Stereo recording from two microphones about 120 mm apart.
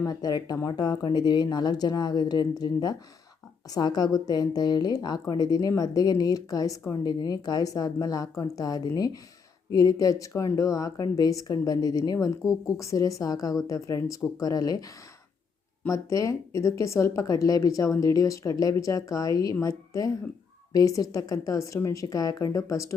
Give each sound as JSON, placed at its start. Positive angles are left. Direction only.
{"t": 0.1, "sound": "speech", "side_deg": 35}
{"t": 15.9, "sound": "a woman's voice", "side_deg": 25}